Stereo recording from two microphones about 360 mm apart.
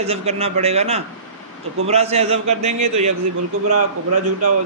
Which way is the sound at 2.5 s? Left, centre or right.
Right.